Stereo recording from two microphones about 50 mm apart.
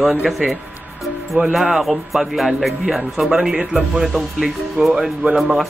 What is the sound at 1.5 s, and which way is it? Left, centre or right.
Speech, centre.